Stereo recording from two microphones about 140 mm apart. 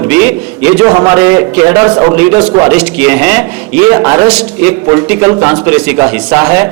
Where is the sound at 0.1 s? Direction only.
15° right (ahead or behind).